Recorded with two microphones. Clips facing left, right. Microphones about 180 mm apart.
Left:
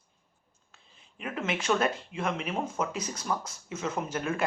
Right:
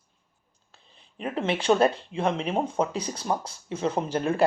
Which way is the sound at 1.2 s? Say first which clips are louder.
Right 5 dB; 30° right (ahead or behind).